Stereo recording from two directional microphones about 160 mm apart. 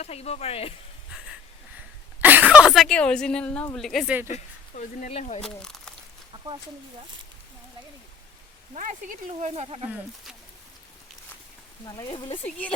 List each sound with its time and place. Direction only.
0.0 s speech: 40° left (ahead or behind)
2.2 s speech: 10° right (ahead or behind)
4.3 s speech: 45° left (ahead or behind)
5.4 s speech: 5° left (ahead or behind)
6.3 s a sound: 30° right (ahead or behind)
8.7 s speech: 50° right (ahead or behind)
11.9 s speech: 25° left (ahead or behind)